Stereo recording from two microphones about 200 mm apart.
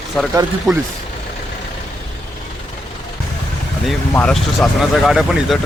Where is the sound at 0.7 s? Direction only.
20° right (ahead or behind).